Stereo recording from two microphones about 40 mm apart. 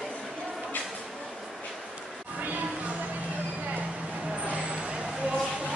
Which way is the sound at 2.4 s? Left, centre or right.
Right.